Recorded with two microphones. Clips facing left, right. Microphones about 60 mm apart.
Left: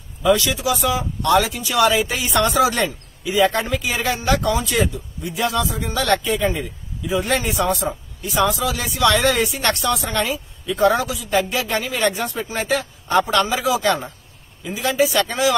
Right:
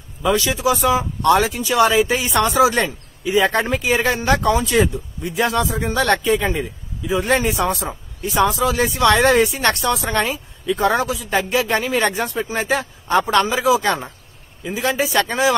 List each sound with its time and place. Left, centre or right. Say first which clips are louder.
0.2 s a man's voice: even; right
3.3 s a man's voice: right 1 dB; right